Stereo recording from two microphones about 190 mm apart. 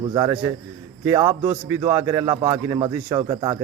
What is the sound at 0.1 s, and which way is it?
A man's voice, 20° right (ahead or behind).